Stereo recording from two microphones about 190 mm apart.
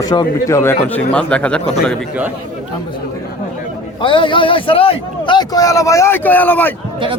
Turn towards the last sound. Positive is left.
turn(degrees=10)  # may be behind; listen again after turning